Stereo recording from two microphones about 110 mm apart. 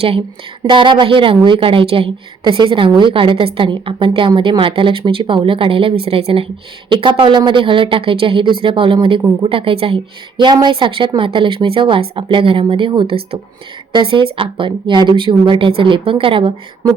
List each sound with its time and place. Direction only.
0.7 s a woman's voice: 45° right (ahead or behind)
6.9 s a woman's voice: 50° right (ahead or behind)